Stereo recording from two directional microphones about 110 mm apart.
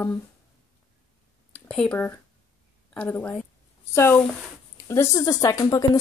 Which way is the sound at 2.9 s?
10° left (ahead or behind).